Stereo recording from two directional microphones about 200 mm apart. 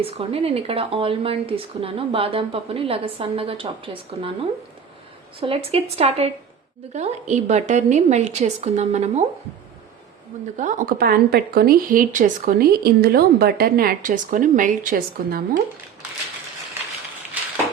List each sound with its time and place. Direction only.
0.0 s speech: 30° right (ahead or behind)
5.4 s a woman's voice: 30° right (ahead or behind)
10.6 s a woman's voice: 40° right (ahead or behind)